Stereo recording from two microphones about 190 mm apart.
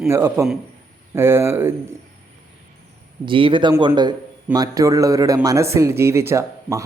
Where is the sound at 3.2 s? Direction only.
25° right (ahead or behind).